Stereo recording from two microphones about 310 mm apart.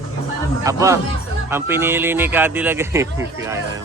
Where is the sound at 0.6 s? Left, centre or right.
Centre.